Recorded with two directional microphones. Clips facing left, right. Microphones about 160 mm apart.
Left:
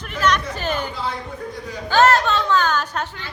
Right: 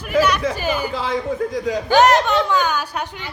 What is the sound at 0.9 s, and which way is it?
Speech, 90° right.